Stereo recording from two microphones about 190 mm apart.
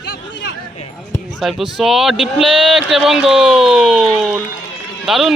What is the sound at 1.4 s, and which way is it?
Speech, centre (ahead or behind).